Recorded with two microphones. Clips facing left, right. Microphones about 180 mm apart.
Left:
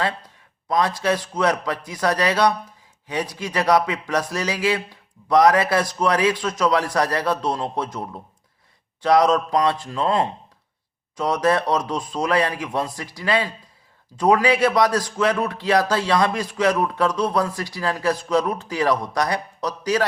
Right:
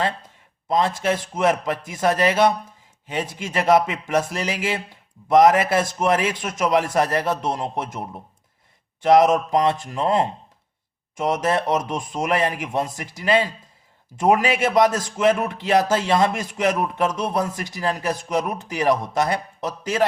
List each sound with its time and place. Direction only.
0.7 s a man's voice: 25° right (ahead or behind)
11.2 s a man's voice: 20° right (ahead or behind)